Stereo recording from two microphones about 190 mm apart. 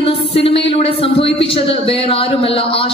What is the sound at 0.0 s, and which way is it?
A man's voice, 30° left (ahead or behind).